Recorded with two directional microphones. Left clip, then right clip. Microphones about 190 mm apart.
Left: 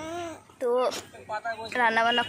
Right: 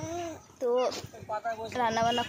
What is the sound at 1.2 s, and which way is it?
Speech, 50° right (ahead or behind).